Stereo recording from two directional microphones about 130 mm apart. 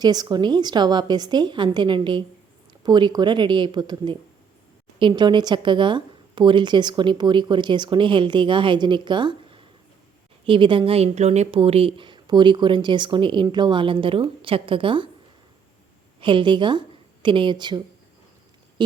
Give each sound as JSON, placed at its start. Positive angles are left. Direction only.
{"t": 0.0, "sound": "speech", "side_deg": -30}
{"t": 16.2, "sound": "speech", "side_deg": -40}